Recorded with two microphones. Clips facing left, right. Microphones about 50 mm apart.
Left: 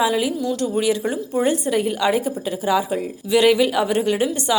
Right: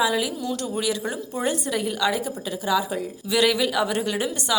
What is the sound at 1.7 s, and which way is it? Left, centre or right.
A woman's voice, left.